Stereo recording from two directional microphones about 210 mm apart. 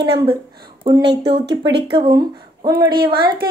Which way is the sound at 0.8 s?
25° right (ahead or behind).